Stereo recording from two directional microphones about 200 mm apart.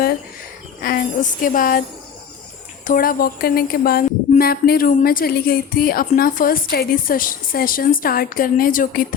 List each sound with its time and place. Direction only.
0.8 s speech: 45° left (ahead or behind)
2.8 s speech: 45° left (ahead or behind)